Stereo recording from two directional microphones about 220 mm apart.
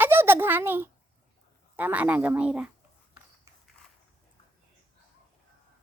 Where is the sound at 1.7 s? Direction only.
5° right (ahead or behind).